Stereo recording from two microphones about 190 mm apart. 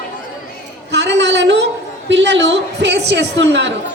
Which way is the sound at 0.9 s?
70° right (ahead or behind).